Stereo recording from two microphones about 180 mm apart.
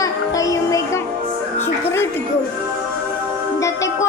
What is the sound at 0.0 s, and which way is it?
Music, 20° left (ahead or behind).